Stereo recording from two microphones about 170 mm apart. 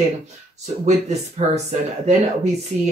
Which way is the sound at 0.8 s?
40° right (ahead or behind).